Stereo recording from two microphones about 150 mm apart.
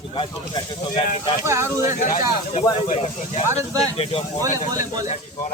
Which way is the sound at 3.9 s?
40° left (ahead or behind).